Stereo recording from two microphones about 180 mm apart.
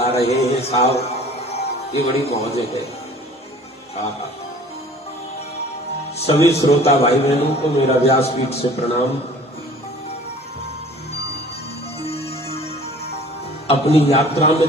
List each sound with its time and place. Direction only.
0.0 s a man's voice: 35° left (ahead or behind)
6.1 s a man's voice: 35° left (ahead or behind)
12.0 s music: 35° left (ahead or behind)
13.7 s a man's voice: 35° left (ahead or behind)